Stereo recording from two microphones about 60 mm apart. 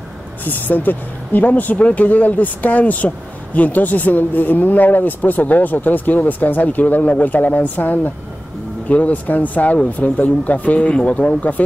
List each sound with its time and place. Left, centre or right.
0.5 s speech: left